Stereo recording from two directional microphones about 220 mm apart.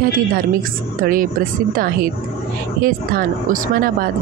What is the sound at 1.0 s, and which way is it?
Speech, 40° right (ahead or behind).